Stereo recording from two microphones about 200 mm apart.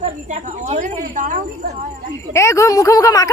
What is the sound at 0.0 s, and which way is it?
A woman's voice, 35° right (ahead or behind).